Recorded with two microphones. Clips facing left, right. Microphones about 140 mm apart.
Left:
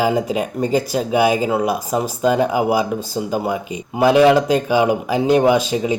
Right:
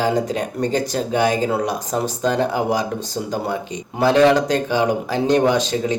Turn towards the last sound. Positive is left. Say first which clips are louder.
# left 3 dB
turn(degrees=10)  # may be behind; listen again after turning